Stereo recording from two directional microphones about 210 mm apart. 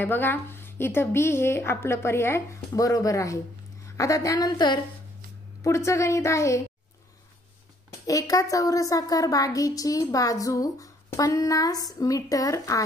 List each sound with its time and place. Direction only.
0.0 s a woman's voice: 10° left (ahead or behind)
8.1 s a woman's voice: 15° left (ahead or behind)